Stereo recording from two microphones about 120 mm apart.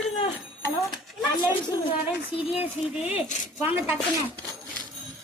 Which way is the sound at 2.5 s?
15° right (ahead or behind).